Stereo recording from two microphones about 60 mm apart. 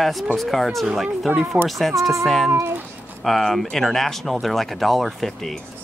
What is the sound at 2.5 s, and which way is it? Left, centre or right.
Speech, right.